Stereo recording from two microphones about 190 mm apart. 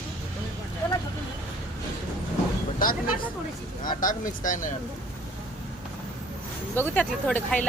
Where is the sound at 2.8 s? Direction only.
45° left (ahead or behind).